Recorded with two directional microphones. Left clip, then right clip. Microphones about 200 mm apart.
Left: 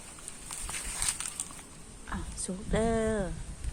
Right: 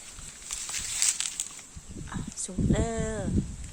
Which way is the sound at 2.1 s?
15° right (ahead or behind).